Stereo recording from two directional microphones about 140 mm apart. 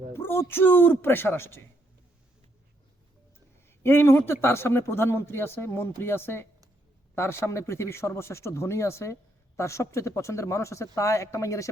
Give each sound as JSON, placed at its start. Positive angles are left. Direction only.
{"t": 0.1, "sound": "a man's voice", "side_deg": 15}
{"t": 3.7, "sound": "a man's voice", "side_deg": 15}